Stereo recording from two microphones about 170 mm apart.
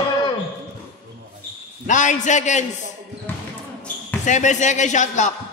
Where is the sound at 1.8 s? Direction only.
45° left (ahead or behind).